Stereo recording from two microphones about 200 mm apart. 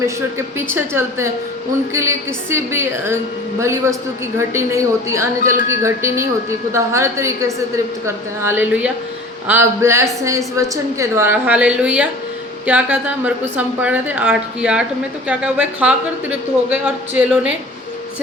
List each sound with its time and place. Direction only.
0.0 s a woman's voice: 10° right (ahead or behind)